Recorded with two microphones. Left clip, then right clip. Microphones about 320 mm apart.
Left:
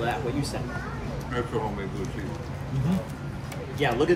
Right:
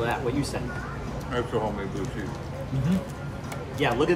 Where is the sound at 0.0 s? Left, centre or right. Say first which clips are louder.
Right 1 dB; centre.